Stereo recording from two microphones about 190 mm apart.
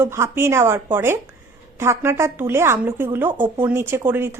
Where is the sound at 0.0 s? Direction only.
15° right (ahead or behind).